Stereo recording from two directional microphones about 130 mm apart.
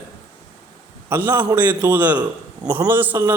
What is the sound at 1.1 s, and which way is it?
A man's voice, 15° right (ahead or behind).